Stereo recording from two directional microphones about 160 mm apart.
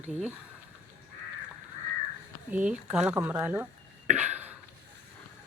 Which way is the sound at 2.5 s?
5° right (ahead or behind).